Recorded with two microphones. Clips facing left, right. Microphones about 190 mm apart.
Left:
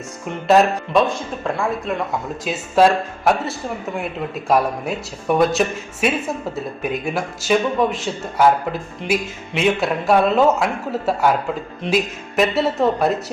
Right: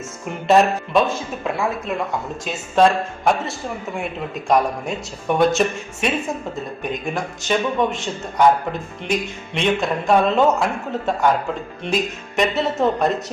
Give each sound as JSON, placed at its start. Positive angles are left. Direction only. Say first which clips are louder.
{"t": 0.3, "sound": "a man's voice", "louder": "left 1 dB", "side_deg": 0}
{"t": 2.4, "sound": "a man's voice", "louder": "left 1 dB", "side_deg": 5}